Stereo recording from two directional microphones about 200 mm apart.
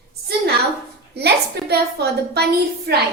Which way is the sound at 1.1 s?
55° right (ahead or behind).